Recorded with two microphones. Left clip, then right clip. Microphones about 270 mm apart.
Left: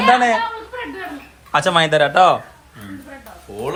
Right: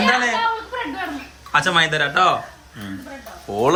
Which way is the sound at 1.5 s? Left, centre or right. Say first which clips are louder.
Left 2 dB; centre.